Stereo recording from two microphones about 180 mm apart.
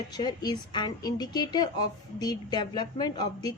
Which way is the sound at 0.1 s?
25° left (ahead or behind).